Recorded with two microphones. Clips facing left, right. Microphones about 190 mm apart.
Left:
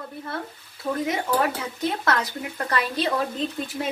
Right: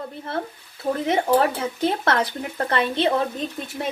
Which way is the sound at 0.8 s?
30° right (ahead or behind).